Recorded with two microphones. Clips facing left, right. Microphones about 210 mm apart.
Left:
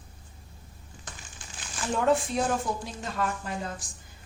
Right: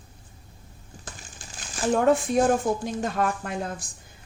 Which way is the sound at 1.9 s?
50° right (ahead or behind).